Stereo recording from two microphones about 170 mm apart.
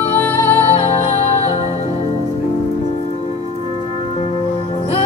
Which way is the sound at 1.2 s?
40° left (ahead or behind).